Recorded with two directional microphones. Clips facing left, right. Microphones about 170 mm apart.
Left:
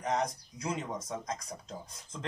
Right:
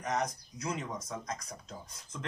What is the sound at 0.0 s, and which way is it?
Speech, 30° left (ahead or behind).